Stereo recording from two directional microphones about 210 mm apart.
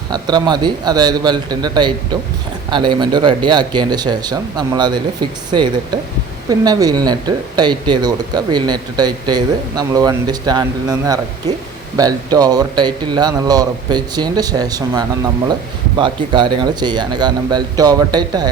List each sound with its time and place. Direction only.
0.1 s speech: 20° right (ahead or behind)